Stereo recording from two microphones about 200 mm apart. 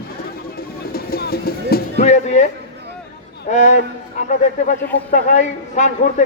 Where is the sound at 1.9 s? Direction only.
35° left (ahead or behind).